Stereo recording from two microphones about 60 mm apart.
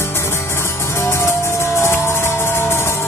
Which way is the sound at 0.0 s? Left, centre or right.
Left.